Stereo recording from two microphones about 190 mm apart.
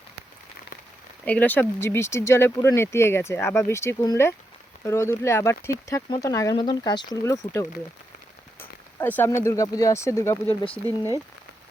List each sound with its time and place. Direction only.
1.2 s speech: 10° left (ahead or behind)
9.0 s speech: 10° left (ahead or behind)